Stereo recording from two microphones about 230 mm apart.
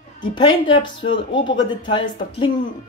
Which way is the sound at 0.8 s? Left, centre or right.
Left.